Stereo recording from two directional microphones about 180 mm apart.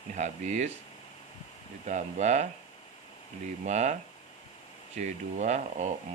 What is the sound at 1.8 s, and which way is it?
Speech, 40° right (ahead or behind).